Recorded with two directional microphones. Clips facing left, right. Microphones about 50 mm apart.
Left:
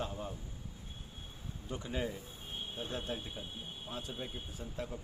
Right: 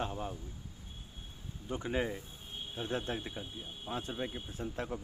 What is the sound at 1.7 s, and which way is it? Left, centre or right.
Speech, right.